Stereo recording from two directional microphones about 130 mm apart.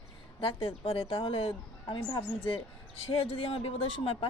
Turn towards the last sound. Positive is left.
turn(degrees=45)  # may be behind; listen again after turning